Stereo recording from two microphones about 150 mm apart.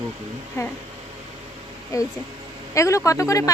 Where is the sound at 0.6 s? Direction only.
20° left (ahead or behind).